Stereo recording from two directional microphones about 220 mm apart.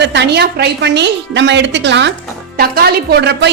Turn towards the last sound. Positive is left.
turn(degrees=-50)  # may be behind; listen again after turning